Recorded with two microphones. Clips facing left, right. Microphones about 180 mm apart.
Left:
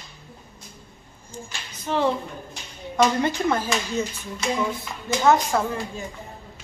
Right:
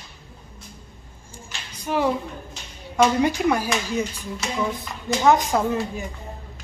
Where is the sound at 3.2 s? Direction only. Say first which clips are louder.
Right 2 dB; 10° right (ahead or behind).